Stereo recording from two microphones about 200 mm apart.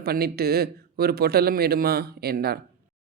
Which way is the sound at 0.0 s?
50° right (ahead or behind).